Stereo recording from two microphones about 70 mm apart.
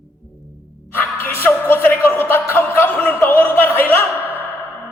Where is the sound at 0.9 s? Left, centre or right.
Left.